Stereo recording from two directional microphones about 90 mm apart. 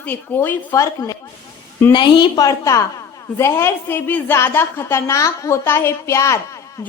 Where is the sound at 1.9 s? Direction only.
60° left (ahead or behind).